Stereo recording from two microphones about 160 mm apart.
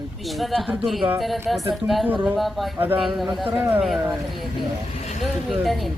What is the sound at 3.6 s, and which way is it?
Speech, 10° right (ahead or behind).